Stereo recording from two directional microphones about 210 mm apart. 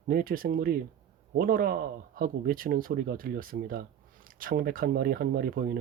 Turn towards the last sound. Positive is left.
turn(degrees=-45)  # may be behind; listen again after turning